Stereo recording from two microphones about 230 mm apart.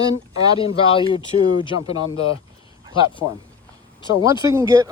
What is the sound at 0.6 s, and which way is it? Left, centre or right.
Speech, left.